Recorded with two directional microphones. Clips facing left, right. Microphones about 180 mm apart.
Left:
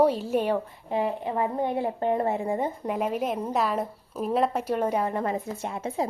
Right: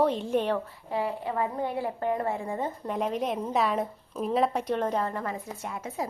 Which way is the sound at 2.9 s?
5° left (ahead or behind).